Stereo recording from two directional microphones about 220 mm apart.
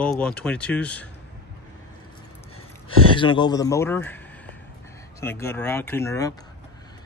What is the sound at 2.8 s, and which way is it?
Speech, 20° left (ahead or behind).